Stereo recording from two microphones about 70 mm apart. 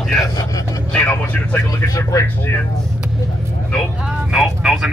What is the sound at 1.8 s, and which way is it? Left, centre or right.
Speech, left.